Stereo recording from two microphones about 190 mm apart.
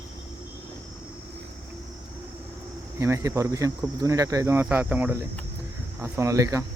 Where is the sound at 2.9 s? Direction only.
15° right (ahead or behind).